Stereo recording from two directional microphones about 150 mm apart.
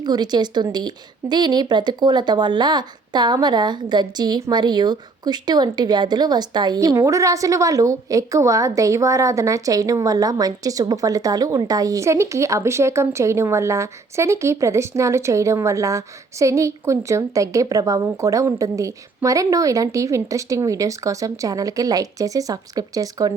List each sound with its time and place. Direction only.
0.0 s a woman's voice: 30° right (ahead or behind)